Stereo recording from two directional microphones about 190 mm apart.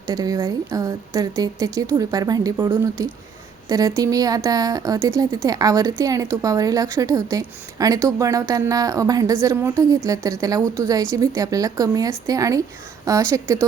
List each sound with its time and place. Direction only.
0.1 s a woman's voice: 20° right (ahead or behind)